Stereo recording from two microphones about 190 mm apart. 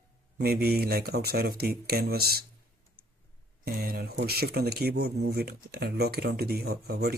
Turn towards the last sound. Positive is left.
turn(degrees=-55)  # may be behind; listen again after turning